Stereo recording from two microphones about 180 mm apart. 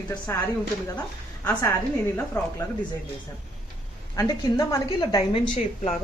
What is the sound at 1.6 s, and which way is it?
Speech, 10° left (ahead or behind).